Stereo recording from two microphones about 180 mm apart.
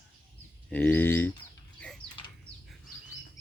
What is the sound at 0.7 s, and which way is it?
Speech, 10° left (ahead or behind).